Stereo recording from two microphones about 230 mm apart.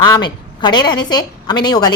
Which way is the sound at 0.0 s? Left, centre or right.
Centre.